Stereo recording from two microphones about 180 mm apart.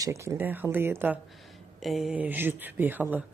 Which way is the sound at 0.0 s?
15° right (ahead or behind).